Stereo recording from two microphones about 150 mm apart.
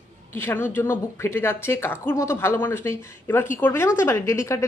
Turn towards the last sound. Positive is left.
turn(degrees=20)  # may be behind; listen again after turning